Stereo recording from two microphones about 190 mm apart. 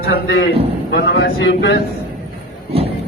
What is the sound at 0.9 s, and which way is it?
Speech, 65° left (ahead or behind).